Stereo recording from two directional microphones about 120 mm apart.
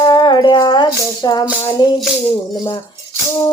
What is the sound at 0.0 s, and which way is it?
Music, 35° left (ahead or behind).